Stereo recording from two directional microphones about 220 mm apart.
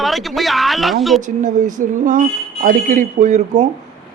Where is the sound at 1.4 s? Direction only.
35° right (ahead or behind).